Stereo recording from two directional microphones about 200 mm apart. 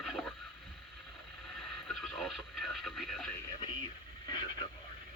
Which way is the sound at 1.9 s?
Centre (ahead or behind).